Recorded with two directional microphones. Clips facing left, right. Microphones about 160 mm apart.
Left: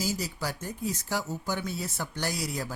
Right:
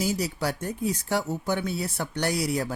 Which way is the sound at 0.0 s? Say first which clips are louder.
Right 5 dB; 60° right (ahead or behind).